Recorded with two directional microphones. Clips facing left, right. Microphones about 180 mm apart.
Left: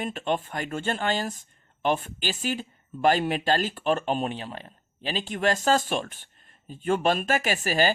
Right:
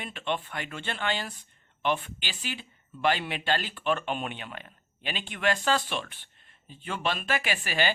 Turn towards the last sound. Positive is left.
turn(degrees=40)  # may be behind; listen again after turning